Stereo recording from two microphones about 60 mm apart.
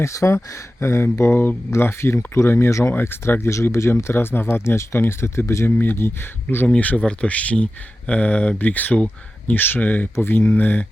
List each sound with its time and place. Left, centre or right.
0.0 s speech: left
5.7 s speech: left